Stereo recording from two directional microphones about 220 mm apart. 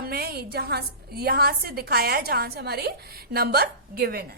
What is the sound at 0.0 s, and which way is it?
A woman's voice, 45° right (ahead or behind).